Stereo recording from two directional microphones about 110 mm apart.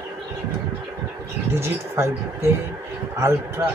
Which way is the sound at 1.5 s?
20° right (ahead or behind).